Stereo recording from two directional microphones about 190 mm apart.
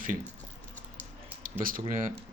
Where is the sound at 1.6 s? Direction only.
45° right (ahead or behind).